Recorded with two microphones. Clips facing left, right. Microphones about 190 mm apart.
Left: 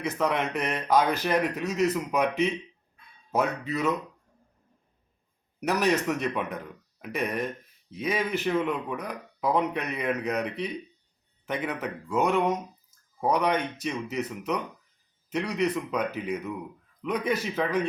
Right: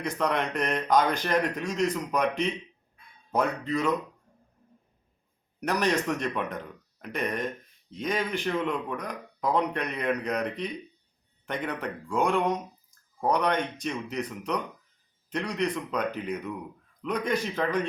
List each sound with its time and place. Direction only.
0.0 s speech: 5° left (ahead or behind)
5.5 s speech: 5° left (ahead or behind)